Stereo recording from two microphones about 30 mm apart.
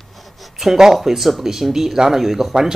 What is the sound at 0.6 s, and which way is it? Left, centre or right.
Speech, centre.